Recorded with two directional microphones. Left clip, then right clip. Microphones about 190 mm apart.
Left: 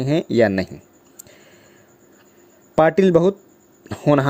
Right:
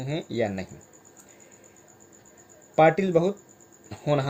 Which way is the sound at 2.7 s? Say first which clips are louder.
Left 5 dB; 40° left (ahead or behind).